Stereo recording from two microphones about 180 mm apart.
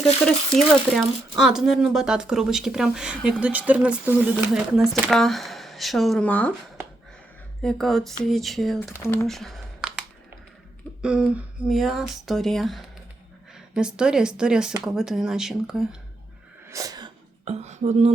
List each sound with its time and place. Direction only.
0.0 s speech: centre (ahead or behind)
7.6 s speech: centre (ahead or behind)
9.0 s speech: 15° left (ahead or behind)
9.2 s a sound: centre (ahead or behind)
11.0 s speech: 5° right (ahead or behind)
16.6 s sneeze: 20° right (ahead or behind)
17.4 s a sound: 35° right (ahead or behind)